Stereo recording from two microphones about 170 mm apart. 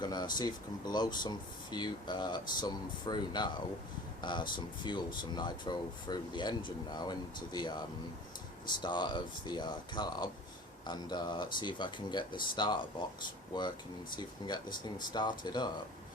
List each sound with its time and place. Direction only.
0.0 s speech: 25° left (ahead or behind)